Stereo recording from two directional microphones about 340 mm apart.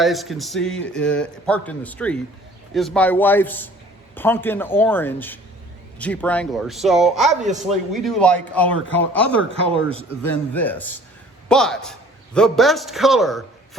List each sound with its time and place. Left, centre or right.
0.0 s a man's voice: centre